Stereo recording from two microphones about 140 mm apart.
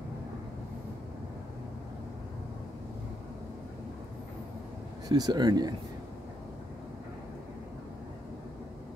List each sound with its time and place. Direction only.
5.0 s speech: 25° right (ahead or behind)